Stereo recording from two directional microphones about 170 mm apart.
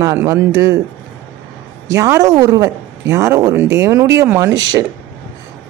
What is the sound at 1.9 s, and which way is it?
A woman's voice, 15° right (ahead or behind).